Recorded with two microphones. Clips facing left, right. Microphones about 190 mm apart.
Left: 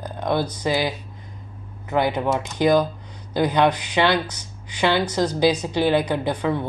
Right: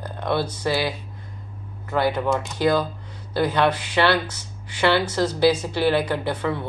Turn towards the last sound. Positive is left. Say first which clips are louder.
# left 2 dB
turn(degrees=15)  # may be behind; listen again after turning